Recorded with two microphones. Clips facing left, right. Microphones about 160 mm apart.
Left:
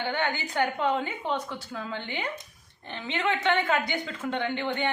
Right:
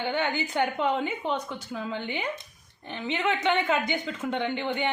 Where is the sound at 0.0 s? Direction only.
15° right (ahead or behind).